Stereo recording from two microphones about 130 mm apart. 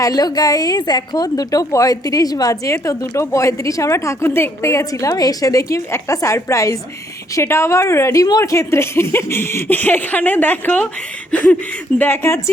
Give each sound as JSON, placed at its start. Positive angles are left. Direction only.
{"t": 0.0, "sound": "a woman's voice", "side_deg": 30}
{"t": 11.3, "sound": "a sound", "side_deg": 10}
{"t": 11.9, "sound": "a woman's voice", "side_deg": 15}